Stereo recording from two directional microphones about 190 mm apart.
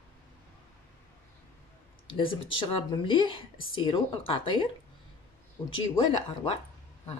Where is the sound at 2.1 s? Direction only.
25° left (ahead or behind).